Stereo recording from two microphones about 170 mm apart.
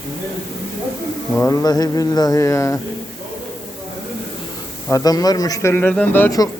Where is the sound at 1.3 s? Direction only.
20° left (ahead or behind).